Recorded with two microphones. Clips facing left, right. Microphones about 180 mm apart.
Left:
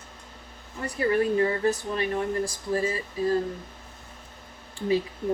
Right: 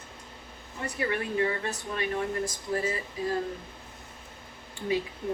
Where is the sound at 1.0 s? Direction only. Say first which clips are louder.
Left 6 dB; 35° left (ahead or behind).